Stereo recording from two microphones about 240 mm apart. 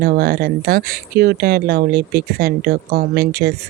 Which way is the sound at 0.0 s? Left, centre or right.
Right.